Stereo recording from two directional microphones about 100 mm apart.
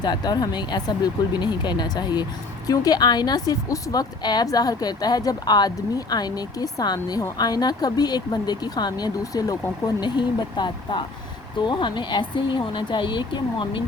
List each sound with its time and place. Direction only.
0.0 s a woman's voice: 45° left (ahead or behind)